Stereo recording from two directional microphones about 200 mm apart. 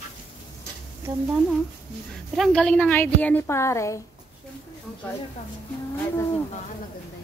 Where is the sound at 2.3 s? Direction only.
Centre (ahead or behind).